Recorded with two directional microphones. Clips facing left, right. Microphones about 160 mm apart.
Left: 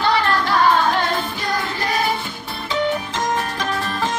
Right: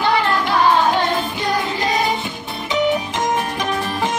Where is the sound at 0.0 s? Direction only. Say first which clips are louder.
Right 1 dB; 15° right (ahead or behind).